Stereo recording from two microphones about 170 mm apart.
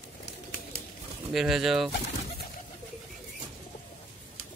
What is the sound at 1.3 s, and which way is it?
Speech, 5° right (ahead or behind).